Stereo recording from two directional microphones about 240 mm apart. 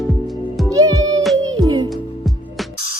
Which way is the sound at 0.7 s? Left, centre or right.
Centre.